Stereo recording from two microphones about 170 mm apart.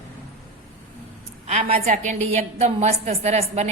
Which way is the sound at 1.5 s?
40° right (ahead or behind).